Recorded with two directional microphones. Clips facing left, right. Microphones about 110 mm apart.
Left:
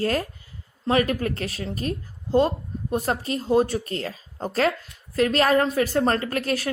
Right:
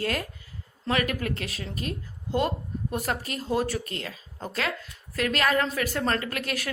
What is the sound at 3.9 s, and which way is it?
A woman's voice, 35° left (ahead or behind).